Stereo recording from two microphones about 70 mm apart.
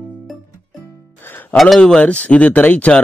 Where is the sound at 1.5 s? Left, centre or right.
Centre.